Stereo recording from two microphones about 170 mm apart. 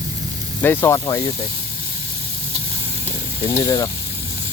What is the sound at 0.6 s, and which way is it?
Speech, 15° left (ahead or behind).